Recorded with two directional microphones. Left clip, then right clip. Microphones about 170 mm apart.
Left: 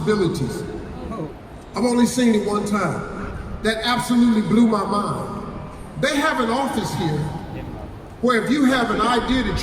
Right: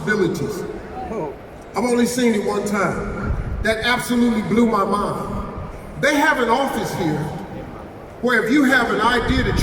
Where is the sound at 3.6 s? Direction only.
35° left (ahead or behind).